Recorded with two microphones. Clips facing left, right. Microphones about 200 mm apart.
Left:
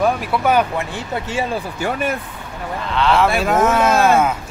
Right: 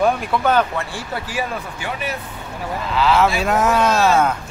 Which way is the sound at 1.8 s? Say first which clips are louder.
Left 7 dB; 50° left (ahead or behind).